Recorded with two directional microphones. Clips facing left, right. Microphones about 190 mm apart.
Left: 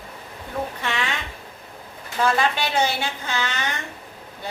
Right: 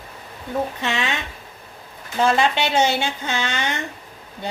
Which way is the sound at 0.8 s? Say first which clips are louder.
Right 3 dB; 20° right (ahead or behind).